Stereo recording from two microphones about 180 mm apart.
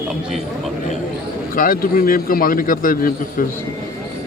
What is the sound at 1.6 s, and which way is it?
A man's voice, 55° left (ahead or behind).